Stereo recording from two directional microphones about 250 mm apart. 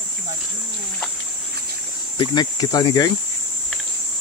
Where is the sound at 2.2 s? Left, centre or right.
Centre.